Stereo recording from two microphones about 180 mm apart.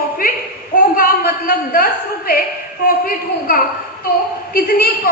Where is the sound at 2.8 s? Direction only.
55° left (ahead or behind).